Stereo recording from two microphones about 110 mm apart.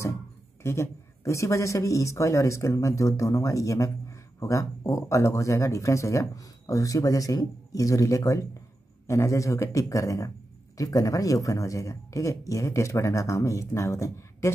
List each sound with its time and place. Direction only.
0.6 s a man's voice: 25° left (ahead or behind)